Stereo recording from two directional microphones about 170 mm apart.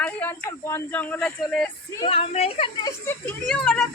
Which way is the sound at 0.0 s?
10° left (ahead or behind).